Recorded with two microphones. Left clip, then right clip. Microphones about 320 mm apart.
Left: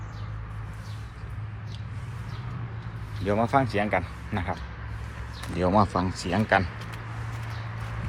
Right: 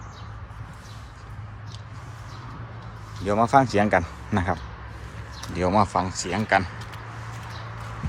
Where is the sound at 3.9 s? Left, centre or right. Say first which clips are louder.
Right 5 dB; centre.